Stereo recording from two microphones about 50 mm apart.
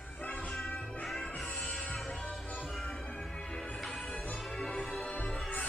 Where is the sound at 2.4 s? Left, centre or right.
Left.